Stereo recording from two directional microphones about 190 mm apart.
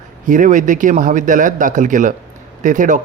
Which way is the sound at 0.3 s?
40° right (ahead or behind).